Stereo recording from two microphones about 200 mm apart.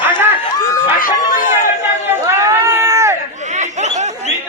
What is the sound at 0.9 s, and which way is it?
Run, 45° left (ahead or behind).